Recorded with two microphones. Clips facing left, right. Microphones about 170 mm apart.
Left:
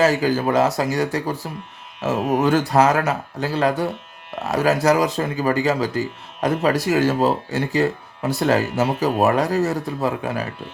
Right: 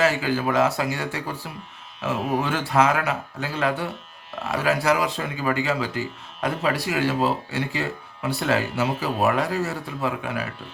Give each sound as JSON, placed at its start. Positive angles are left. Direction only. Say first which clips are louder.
{"t": 0.0, "sound": "speech", "louder": "left 4 dB", "side_deg": 40}